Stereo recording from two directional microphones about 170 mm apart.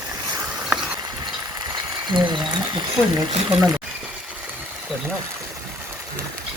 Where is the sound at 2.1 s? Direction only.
25° right (ahead or behind).